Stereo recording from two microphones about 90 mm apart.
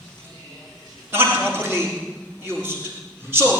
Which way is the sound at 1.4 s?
5° left (ahead or behind).